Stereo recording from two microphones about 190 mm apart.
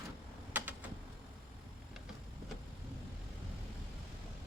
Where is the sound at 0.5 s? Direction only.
10° right (ahead or behind).